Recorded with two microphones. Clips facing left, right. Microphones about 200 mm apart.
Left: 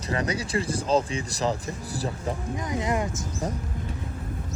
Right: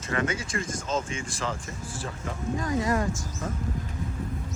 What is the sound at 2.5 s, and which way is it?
Speech, 20° left (ahead or behind).